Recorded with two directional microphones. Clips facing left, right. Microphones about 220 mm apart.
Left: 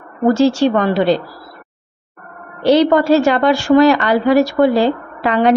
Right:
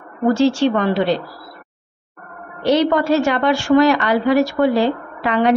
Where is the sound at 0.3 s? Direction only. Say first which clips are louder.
Left 2 dB; 40° left (ahead or behind).